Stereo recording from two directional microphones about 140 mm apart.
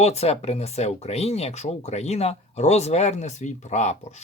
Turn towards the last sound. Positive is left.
turn(degrees=55)  # may be behind; listen again after turning